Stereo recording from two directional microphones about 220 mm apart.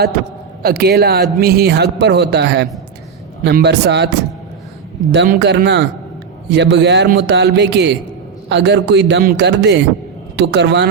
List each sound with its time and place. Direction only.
0.6 s speech: 45° right (ahead or behind)
5.1 s speech: 50° right (ahead or behind)